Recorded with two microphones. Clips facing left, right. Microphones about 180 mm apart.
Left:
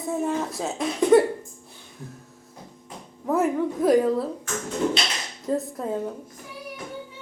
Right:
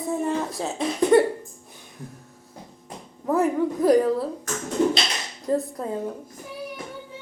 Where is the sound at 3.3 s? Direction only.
Centre (ahead or behind).